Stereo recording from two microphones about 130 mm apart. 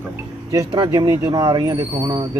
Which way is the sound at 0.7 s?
35° right (ahead or behind).